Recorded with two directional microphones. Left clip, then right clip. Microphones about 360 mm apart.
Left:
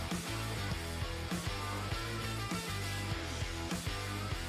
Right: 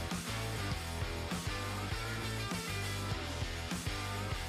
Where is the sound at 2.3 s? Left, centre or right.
Centre.